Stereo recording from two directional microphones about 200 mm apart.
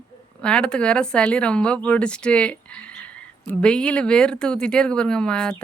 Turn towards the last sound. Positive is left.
turn(degrees=5)  # may be behind; listen again after turning